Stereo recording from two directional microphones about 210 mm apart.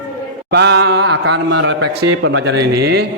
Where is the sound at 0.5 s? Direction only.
55° right (ahead or behind).